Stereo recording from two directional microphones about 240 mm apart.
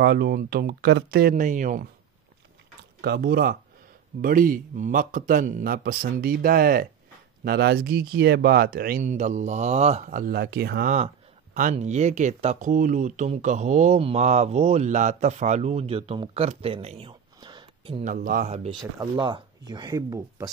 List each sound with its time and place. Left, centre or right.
0.0 s speech: right
3.0 s speech: right; by 17.9 s centre
18.0 s speech: right; by 20.4 s centre